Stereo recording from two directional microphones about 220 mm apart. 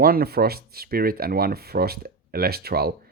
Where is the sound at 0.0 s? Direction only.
45° right (ahead or behind).